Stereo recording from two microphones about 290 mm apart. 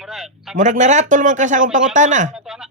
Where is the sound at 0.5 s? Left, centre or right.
Right.